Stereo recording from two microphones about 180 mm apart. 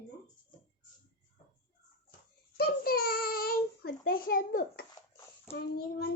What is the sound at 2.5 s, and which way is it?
Child singing, 60° left (ahead or behind).